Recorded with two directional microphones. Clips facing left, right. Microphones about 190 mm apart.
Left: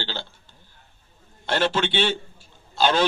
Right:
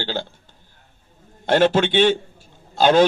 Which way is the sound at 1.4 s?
45° right (ahead or behind).